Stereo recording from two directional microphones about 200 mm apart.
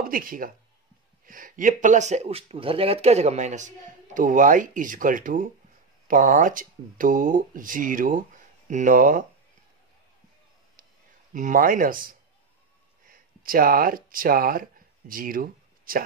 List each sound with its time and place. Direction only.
0.0 s speech: 45° right (ahead or behind)
11.3 s speech: 40° right (ahead or behind)
13.1 s speech: 45° right (ahead or behind)